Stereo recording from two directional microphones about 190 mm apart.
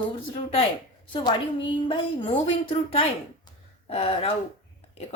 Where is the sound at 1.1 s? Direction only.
25° left (ahead or behind).